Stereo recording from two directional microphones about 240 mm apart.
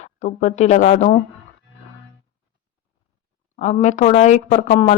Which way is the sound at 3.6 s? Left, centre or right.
Left.